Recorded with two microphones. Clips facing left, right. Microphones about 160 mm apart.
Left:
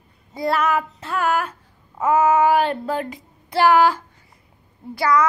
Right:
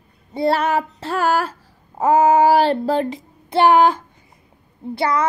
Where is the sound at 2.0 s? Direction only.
30° right (ahead or behind).